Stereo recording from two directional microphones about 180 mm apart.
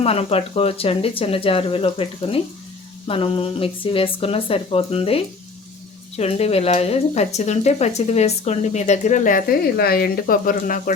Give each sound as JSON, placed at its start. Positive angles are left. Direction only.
{"t": 0.0, "sound": "speech", "side_deg": 35}